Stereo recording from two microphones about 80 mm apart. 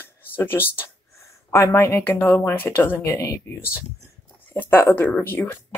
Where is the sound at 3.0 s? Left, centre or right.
Left.